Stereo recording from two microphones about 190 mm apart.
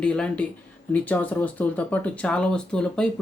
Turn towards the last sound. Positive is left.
turn(degrees=5)  # may be behind; listen again after turning